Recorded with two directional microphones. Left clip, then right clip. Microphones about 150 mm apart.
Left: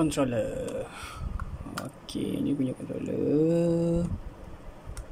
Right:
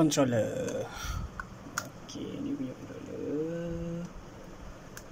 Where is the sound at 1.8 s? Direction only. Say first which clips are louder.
Left 2 dB; 30° left (ahead or behind).